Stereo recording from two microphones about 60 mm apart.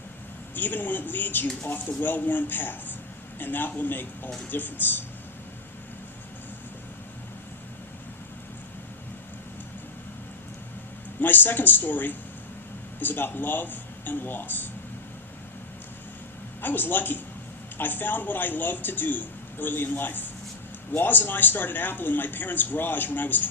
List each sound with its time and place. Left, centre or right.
0.5 s speech: left
11.2 s speech: left
16.6 s speech: left